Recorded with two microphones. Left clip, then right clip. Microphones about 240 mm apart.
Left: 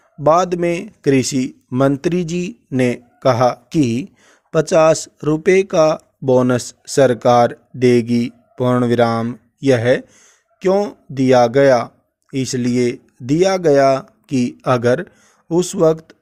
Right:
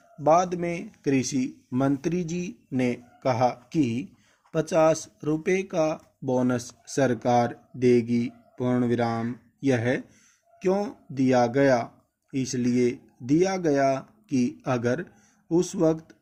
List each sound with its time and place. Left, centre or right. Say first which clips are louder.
0.2 s speech: left 8 dB; left